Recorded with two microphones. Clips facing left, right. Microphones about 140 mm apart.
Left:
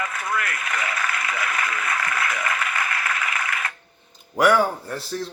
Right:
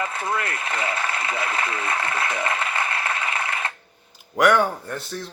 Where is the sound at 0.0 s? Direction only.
30° right (ahead or behind).